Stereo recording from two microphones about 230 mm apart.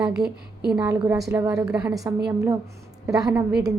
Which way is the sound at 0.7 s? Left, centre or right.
Centre.